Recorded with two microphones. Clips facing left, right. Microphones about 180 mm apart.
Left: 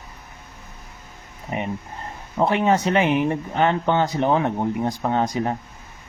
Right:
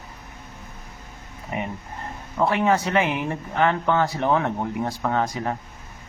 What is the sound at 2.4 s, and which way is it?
Speech, 20° left (ahead or behind).